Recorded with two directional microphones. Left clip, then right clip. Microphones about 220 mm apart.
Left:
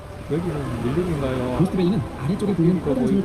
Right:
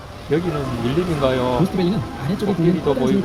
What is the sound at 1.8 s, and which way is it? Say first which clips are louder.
Speech: right 1 dB; 45° left (ahead or behind).